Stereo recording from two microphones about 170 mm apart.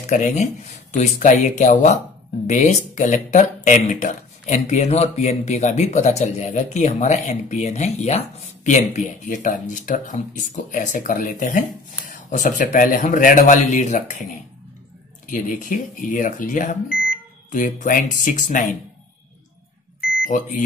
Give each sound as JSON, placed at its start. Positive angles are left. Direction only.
{"t": 0.0, "sound": "speech", "side_deg": 45}
{"t": 20.2, "sound": "speech", "side_deg": 50}